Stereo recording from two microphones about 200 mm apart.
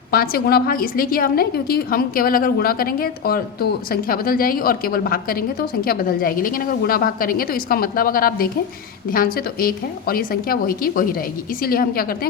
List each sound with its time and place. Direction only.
0.1 s a woman's voice: 50° left (ahead or behind)